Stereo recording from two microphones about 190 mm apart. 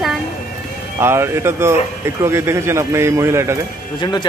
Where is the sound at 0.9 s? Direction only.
15° right (ahead or behind).